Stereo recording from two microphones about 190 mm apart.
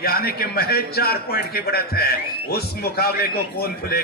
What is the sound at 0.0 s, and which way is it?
A man's voice, 55° left (ahead or behind).